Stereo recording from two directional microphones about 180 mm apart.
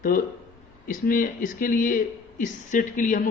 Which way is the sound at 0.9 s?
50° left (ahead or behind).